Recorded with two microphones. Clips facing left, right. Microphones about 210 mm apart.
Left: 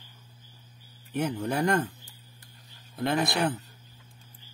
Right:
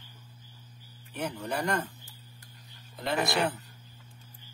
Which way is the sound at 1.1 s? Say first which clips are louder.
Left 5 dB; 55° left (ahead or behind).